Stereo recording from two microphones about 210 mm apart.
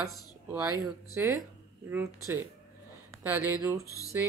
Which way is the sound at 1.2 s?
10° right (ahead or behind).